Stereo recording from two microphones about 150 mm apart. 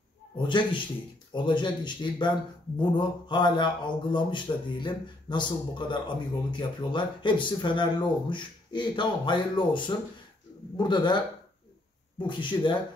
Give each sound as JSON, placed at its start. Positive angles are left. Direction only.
{"t": 0.4, "sound": "a man's voice", "side_deg": 35}
{"t": 12.2, "sound": "a man's voice", "side_deg": 30}